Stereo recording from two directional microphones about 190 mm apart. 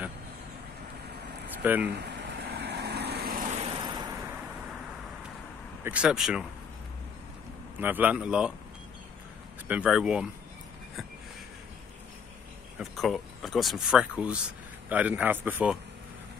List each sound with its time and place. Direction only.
1.6 s speech: 5° right (ahead or behind)
2.0 s vehicle: 65° right (ahead or behind)
3.5 s vehicle: 30° right (ahead or behind)
5.9 s speech: 5° right (ahead or behind)
7.8 s speech: 10° right (ahead or behind)
9.7 s speech: 5° right (ahead or behind)
12.7 s a man's voice: centre (ahead or behind)